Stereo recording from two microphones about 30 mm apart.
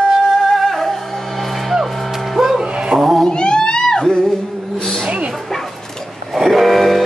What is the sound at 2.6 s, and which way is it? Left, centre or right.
Music, right.